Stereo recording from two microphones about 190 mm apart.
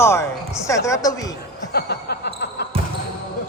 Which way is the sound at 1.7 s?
60° left (ahead or behind).